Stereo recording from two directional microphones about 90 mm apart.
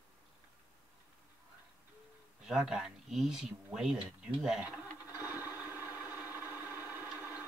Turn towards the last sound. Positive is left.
turn(degrees=-25)  # may be behind; listen again after turning